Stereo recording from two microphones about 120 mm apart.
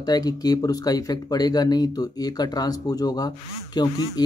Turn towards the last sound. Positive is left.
turn(degrees=35)  # may be behind; listen again after turning